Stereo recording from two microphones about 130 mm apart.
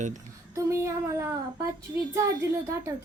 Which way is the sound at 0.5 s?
25° right (ahead or behind).